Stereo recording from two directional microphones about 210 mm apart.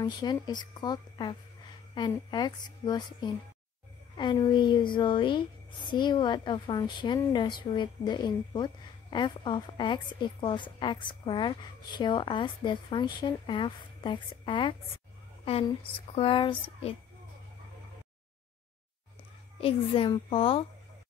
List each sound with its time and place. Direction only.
0.0 s a woman's voice: 20° left (ahead or behind)
16.2 s a woman's voice: 25° left (ahead or behind)
19.6 s a woman's voice: 25° left (ahead or behind)